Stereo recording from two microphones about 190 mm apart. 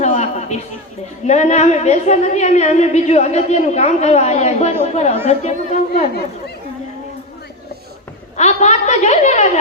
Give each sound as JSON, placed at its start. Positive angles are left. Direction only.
{"t": 0.0, "sound": "a sound", "side_deg": 35}
{"t": 1.3, "sound": "a woman's voice", "side_deg": 35}
{"t": 8.4, "sound": "a woman's voice", "side_deg": 35}